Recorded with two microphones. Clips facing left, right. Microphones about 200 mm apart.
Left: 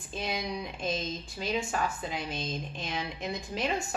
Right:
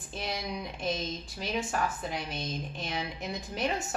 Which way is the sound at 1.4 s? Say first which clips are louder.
Left 1 dB; centre (ahead or behind).